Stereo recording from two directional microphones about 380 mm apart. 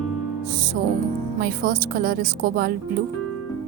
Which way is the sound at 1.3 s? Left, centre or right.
Right.